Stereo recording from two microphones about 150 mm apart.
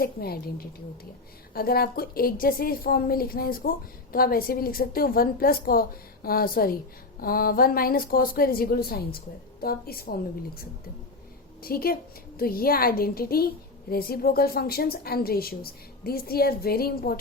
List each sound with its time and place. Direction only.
0.0 s a woman's voice: 90° left
1.5 s a woman's voice: 90° left